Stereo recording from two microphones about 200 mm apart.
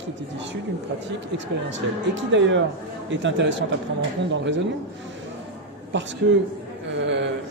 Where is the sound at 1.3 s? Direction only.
65° right (ahead or behind).